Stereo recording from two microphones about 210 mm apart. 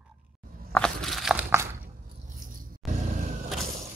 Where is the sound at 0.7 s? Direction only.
5° left (ahead or behind).